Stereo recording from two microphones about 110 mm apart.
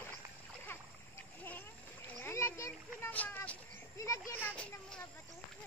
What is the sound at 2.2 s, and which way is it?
Splash, 25° left (ahead or behind).